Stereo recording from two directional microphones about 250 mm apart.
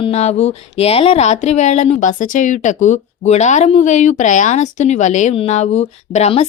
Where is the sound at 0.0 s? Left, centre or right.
Left.